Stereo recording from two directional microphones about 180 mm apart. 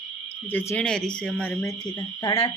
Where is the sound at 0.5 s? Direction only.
10° left (ahead or behind).